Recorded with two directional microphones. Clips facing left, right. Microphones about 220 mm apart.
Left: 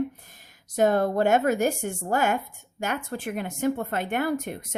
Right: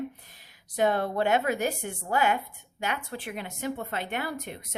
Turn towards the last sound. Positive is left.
turn(degrees=50)  # may be behind; listen again after turning